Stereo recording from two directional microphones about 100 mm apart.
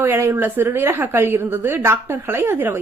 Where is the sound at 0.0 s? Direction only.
25° right (ahead or behind).